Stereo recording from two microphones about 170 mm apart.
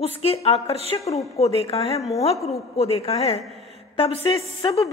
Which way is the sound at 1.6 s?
35° left (ahead or behind).